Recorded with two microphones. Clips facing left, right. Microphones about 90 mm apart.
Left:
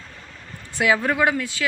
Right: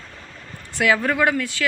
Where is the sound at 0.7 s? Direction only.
15° left (ahead or behind).